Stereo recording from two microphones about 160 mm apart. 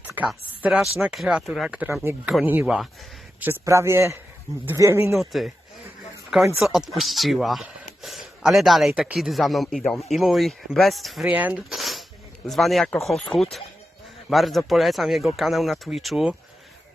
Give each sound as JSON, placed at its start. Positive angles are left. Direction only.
{"t": 0.2, "sound": "a man's voice", "side_deg": -5}
{"t": 5.1, "sound": "speech", "side_deg": 0}
{"t": 6.6, "sound": "speech", "side_deg": 0}